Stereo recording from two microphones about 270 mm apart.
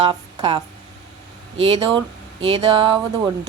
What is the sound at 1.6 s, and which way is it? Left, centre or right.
Speech, right.